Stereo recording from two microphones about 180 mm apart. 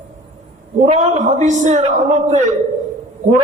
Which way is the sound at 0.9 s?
40° right (ahead or behind).